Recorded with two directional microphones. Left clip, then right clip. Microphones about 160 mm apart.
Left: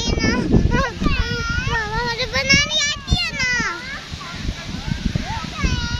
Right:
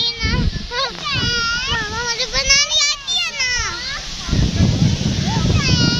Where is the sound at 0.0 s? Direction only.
30° left (ahead or behind).